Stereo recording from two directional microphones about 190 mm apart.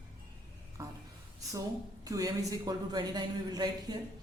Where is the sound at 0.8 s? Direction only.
15° right (ahead or behind).